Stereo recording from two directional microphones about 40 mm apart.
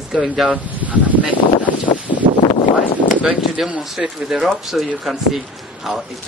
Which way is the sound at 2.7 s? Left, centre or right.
Right.